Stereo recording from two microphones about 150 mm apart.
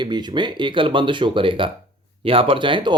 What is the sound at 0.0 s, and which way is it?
Speech, 30° right (ahead or behind).